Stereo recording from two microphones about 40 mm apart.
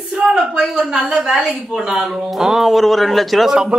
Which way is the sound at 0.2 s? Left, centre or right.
Centre.